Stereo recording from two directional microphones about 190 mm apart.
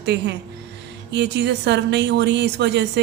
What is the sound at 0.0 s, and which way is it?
A woman's voice, 65° right (ahead or behind).